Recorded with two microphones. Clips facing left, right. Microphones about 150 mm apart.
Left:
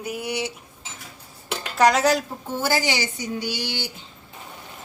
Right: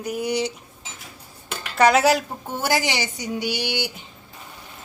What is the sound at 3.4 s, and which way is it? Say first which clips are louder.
Speech: right 7 dB; 15° right (ahead or behind).